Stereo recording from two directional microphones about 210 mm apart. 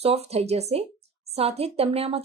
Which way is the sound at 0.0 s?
30° right (ahead or behind).